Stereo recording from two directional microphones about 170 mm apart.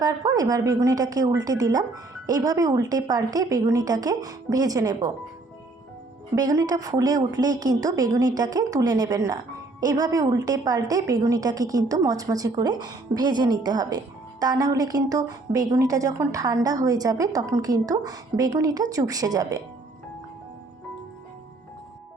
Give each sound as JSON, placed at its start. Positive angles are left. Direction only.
{"t": 0.0, "sound": "a woman's voice", "side_deg": -20}
{"t": 6.3, "sound": "a woman's voice", "side_deg": -20}